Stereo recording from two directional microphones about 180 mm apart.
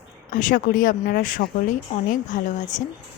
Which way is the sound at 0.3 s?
45° left (ahead or behind).